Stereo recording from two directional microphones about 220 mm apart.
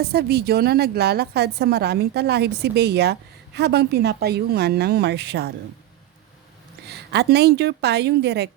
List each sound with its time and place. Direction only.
0.1 s a woman's voice: 45° right (ahead or behind)
6.8 s a woman's voice: 50° right (ahead or behind)